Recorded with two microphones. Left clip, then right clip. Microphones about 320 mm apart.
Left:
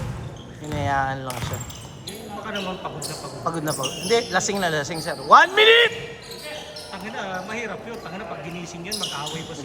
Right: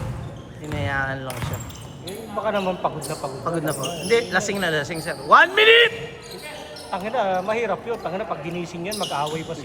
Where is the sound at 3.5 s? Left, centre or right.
Centre.